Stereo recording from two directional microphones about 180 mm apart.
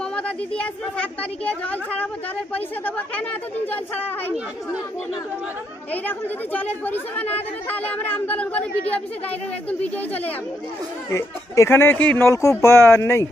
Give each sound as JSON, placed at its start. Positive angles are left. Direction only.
{"t": 0.0, "sound": "a woman's voice", "side_deg": 5}
{"t": 5.9, "sound": "speech", "side_deg": 10}